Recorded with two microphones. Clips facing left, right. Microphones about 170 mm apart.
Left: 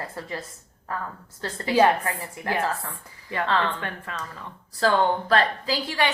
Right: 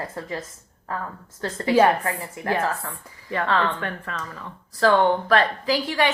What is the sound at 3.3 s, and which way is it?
Speech, 25° left (ahead or behind).